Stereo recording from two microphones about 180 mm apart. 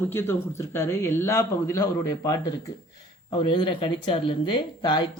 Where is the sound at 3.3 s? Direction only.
30° left (ahead or behind).